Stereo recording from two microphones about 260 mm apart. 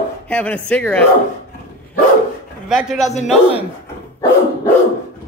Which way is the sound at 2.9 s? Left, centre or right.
Centre.